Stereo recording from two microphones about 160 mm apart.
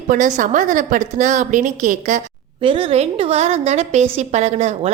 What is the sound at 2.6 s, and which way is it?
A woman's voice, 35° right (ahead or behind).